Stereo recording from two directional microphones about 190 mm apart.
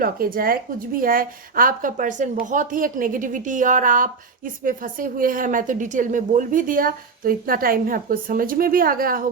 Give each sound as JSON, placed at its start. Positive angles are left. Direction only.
{"t": 0.0, "sound": "a woman's voice", "side_deg": -50}